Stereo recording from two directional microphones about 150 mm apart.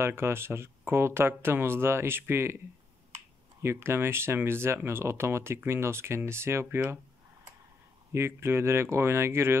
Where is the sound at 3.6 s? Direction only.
15° right (ahead or behind).